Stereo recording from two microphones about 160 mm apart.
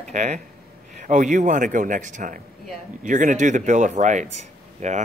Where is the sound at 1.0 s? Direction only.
50° right (ahead or behind).